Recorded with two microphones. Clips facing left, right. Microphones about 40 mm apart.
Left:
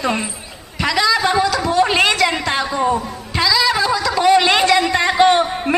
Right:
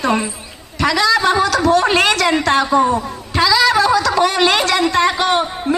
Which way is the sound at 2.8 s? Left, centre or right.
Centre.